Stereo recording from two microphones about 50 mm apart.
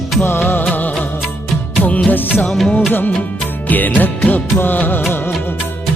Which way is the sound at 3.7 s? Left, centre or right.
Left.